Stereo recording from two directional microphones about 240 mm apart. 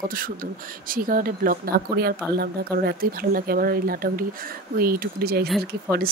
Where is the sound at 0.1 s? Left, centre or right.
Right.